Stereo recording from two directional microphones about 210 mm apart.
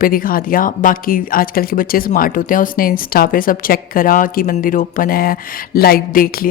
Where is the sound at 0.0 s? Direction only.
40° left (ahead or behind).